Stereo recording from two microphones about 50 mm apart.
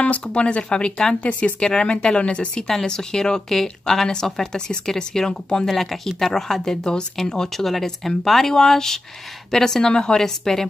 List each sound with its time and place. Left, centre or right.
0.0 s speech: left; by 10.7 s centre